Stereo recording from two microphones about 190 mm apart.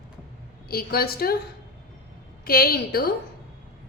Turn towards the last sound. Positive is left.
turn(degrees=55)  # may be behind; listen again after turning